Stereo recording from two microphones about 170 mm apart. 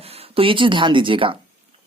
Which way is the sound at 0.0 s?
35° right (ahead or behind).